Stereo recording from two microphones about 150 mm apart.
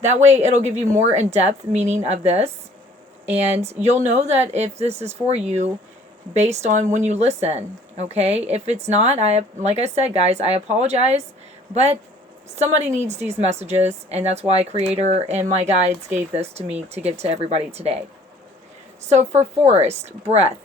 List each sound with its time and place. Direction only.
0.0 s speech: 50° right (ahead or behind)
3.7 s speech: 50° right (ahead or behind)
19.0 s speech: 50° right (ahead or behind)